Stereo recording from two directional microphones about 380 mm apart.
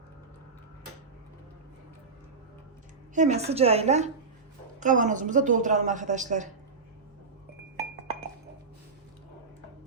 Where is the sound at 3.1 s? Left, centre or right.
Centre.